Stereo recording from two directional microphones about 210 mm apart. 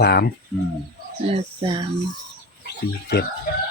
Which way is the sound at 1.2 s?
25° right (ahead or behind).